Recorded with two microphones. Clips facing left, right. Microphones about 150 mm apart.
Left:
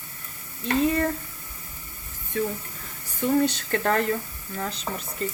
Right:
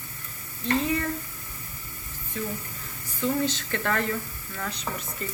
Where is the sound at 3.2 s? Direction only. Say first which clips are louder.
Left 4 dB; 45° left (ahead or behind); by 5.0 s 30° left (ahead or behind).